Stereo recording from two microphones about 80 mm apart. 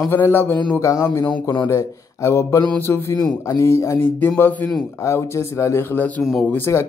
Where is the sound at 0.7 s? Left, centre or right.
Left.